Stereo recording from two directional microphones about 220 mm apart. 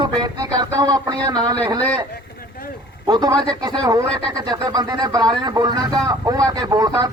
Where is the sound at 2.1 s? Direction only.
40° left (ahead or behind).